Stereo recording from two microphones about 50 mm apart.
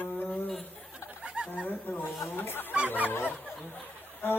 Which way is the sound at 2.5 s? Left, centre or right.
Left.